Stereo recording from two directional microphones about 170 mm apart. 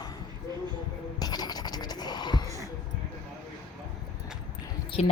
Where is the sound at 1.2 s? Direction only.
25° left (ahead or behind).